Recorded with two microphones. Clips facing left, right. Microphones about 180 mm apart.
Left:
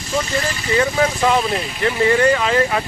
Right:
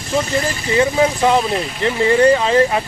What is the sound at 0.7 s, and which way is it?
Speech, 25° right (ahead or behind).